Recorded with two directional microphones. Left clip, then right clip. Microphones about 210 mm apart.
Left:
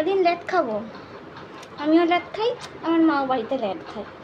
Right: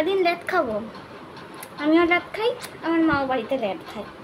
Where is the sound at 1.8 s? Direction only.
20° right (ahead or behind).